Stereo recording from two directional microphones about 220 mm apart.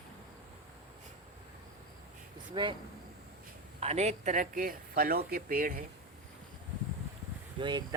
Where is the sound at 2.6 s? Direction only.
20° right (ahead or behind).